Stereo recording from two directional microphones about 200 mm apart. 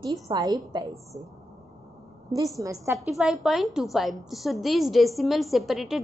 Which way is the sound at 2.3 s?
15° right (ahead or behind).